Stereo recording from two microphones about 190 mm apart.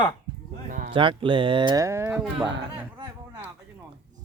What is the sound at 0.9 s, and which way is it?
Speech, 25° right (ahead or behind).